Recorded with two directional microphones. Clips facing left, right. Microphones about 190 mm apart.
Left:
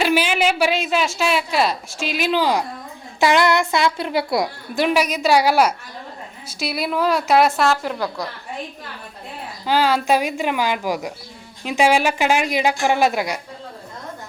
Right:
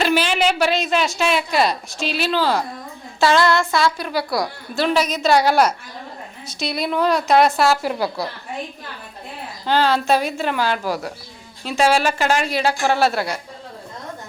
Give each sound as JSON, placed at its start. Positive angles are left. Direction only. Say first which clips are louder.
{"t": 0.0, "sound": "a sound", "louder": "even", "side_deg": 10}
{"t": 1.2, "sound": "a woman's voice", "louder": "right 1 dB", "side_deg": 5}
{"t": 9.6, "sound": "a woman's voice", "louder": "even", "side_deg": 10}